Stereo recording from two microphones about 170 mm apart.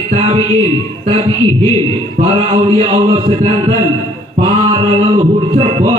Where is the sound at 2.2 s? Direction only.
35° right (ahead or behind).